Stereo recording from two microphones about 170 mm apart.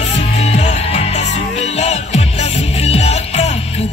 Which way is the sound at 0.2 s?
40° left (ahead or behind).